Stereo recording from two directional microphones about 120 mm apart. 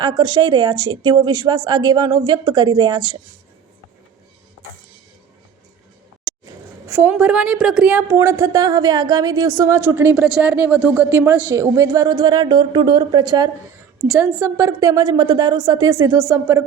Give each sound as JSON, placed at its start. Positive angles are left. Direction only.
{"t": 0.0, "sound": "speech", "side_deg": -35}
{"t": 6.8, "sound": "a woman's voice", "side_deg": -20}
{"t": 14.1, "sound": "a woman's voice", "side_deg": -15}